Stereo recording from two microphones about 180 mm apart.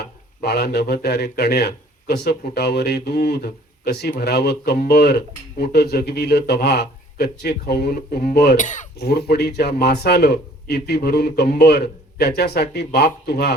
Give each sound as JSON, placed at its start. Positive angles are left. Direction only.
{"t": 0.0, "sound": "speech", "side_deg": 65}
{"t": 8.5, "sound": "speech", "side_deg": 45}
{"t": 9.0, "sound": "speech", "side_deg": 65}